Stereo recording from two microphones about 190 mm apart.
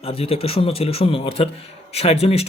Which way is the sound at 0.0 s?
30° left (ahead or behind).